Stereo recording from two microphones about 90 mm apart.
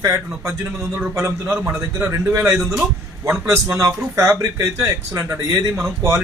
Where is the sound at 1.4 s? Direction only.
20° right (ahead or behind).